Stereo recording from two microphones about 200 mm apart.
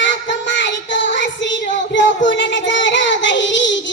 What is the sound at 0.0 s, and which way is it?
Child singing, 65° left (ahead or behind).